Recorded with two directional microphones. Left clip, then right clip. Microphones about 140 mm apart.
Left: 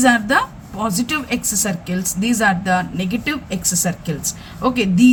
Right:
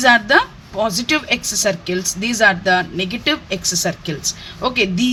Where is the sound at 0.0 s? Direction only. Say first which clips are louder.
Right 3 dB; 35° right (ahead or behind).